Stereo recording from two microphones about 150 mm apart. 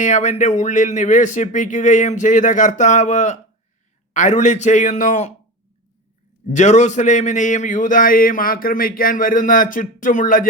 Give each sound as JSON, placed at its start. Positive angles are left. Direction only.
{"t": 0.0, "sound": "a man's voice", "side_deg": 50}
{"t": 6.5, "sound": "a man's voice", "side_deg": 50}